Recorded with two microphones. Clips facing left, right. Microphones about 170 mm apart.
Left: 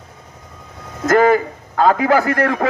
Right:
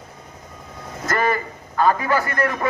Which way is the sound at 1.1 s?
90° left.